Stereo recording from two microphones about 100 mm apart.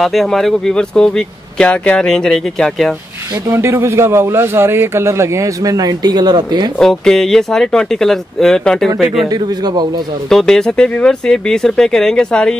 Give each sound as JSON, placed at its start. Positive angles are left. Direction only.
{"t": 0.0, "sound": "speech", "side_deg": 0}
{"t": 3.4, "sound": "a man's voice", "side_deg": -30}
{"t": 6.8, "sound": "speech", "side_deg": 5}
{"t": 9.3, "sound": "a man's voice", "side_deg": -45}
{"t": 10.3, "sound": "speech", "side_deg": 5}